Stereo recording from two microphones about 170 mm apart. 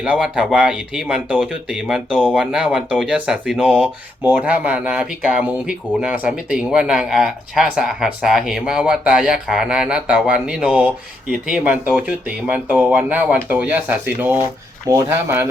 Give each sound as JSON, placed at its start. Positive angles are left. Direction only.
{"t": 0.0, "sound": "speech", "side_deg": -5}
{"t": 14.8, "sound": "speech", "side_deg": -20}